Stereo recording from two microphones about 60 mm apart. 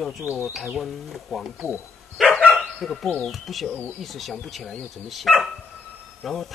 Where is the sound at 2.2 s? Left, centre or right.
Centre.